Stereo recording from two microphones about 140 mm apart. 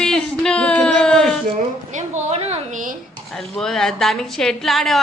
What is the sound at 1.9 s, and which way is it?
A woman's voice, 60° right (ahead or behind).